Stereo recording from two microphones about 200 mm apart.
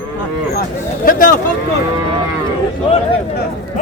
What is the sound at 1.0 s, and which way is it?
Speech, 45° left (ahead or behind).